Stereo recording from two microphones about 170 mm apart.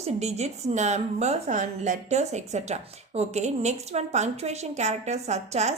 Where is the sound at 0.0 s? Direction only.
40° right (ahead or behind).